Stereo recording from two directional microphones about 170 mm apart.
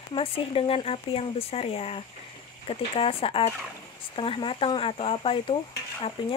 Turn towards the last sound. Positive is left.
turn(degrees=30)  # may be behind; listen again after turning